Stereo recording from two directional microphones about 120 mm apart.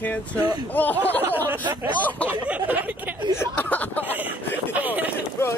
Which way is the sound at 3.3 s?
15° left (ahead or behind).